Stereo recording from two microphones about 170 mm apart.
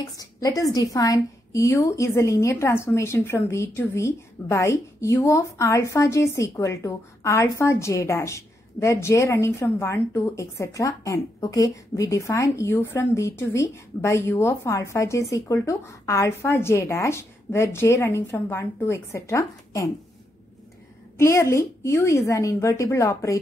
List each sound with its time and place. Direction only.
0.2 s a woman's voice: 20° left (ahead or behind)
21.2 s a woman's voice: 15° left (ahead or behind)